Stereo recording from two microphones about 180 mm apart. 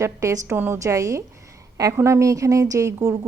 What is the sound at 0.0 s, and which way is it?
A woman's voice, 15° right (ahead or behind).